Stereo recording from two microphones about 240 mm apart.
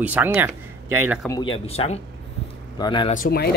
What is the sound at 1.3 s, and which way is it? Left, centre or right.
Speech, left.